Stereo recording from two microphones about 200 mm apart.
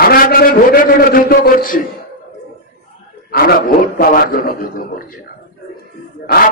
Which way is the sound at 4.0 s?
45° left (ahead or behind).